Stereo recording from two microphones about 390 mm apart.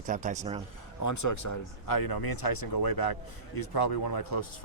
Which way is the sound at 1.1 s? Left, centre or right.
Left.